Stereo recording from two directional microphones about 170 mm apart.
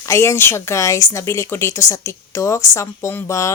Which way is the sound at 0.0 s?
15° left (ahead or behind).